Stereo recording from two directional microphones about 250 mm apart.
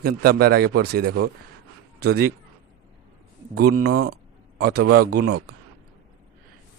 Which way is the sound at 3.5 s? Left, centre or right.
Right.